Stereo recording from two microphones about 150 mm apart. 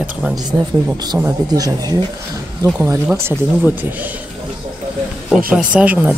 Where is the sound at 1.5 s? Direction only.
25° right (ahead or behind).